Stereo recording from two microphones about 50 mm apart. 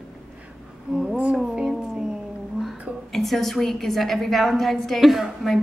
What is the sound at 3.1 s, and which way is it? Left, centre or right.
A woman's voice, centre.